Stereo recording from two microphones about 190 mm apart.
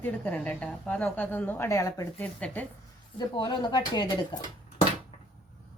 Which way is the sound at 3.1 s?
25° left (ahead or behind).